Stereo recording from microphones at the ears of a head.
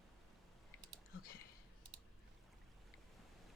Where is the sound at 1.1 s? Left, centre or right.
Left.